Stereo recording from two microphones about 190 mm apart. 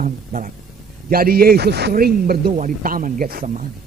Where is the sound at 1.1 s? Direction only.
55° right (ahead or behind).